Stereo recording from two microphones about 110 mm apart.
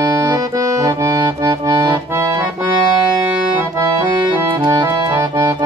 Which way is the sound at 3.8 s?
45° right (ahead or behind).